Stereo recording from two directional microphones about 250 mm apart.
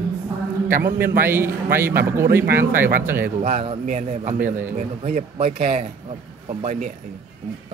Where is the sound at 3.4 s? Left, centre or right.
Right.